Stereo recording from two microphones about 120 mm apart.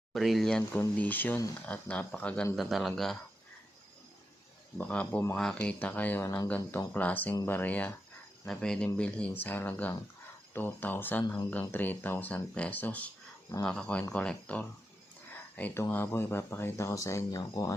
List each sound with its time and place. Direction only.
0.1 s speech: centre (ahead or behind)
4.8 s speech: 10° left (ahead or behind)
6.2 s speech: 25° left (ahead or behind)